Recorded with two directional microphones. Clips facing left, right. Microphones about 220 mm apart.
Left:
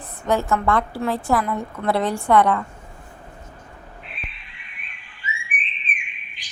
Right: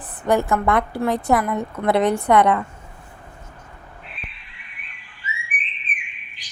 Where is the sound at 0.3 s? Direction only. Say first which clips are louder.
Right 2 dB; 15° right (ahead or behind).